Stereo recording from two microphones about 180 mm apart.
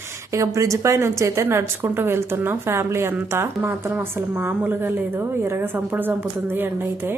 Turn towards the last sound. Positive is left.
turn(degrees=-10)  # may be behind; listen again after turning